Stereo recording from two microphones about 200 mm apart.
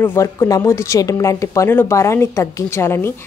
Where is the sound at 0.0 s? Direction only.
10° left (ahead or behind).